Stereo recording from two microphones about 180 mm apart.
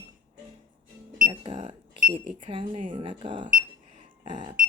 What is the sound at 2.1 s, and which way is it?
Speech, 30° right (ahead or behind).